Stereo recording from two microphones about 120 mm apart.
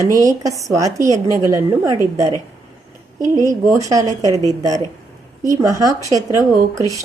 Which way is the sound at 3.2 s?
30° right (ahead or behind).